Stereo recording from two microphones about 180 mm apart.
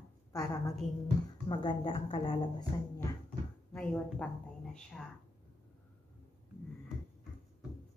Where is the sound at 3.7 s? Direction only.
5° left (ahead or behind).